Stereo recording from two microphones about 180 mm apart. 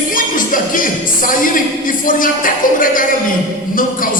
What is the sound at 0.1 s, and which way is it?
Music, 50° left (ahead or behind).